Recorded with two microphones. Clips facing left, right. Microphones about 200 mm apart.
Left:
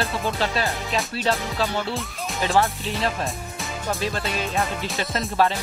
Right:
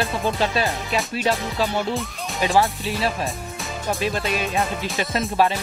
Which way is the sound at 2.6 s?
Centre (ahead or behind).